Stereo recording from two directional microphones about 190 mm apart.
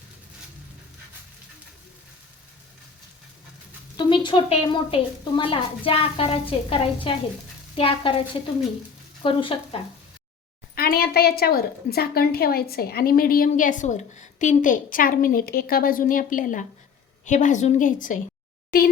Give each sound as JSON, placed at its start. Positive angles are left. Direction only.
{"t": 3.9, "sound": "a woman's voice", "side_deg": 25}
{"t": 10.8, "sound": "a woman's voice", "side_deg": 50}